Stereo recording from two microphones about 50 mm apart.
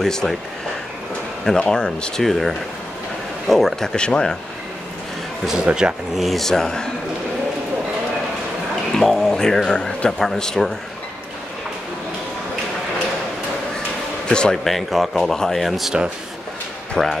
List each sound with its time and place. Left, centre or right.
0.0 s speech: centre
1.4 s speech: centre
4.0 s speech: centre
5.7 s speech: right
6.1 s speech: centre
8.9 s speech: centre
14.5 s speech: centre
17.0 s speech: centre